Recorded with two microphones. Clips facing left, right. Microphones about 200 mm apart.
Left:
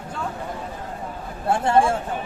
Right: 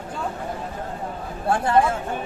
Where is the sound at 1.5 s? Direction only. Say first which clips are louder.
Left 1 dB; 25° left (ahead or behind).